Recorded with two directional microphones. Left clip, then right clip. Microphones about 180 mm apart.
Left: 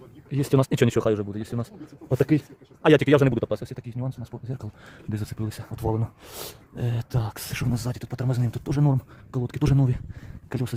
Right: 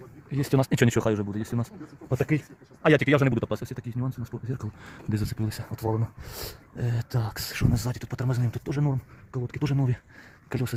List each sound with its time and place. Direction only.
0.3 s speech: 10° left (ahead or behind); by 1.6 s 5° right (ahead or behind)
2.1 s speech: 40° left (ahead or behind)
2.8 s speech: 20° left (ahead or behind)
8.8 s speech: 35° left (ahead or behind)
10.5 s speech: 5° left (ahead or behind)